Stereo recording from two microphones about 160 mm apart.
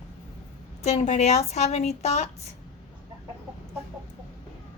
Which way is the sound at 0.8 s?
45° left (ahead or behind).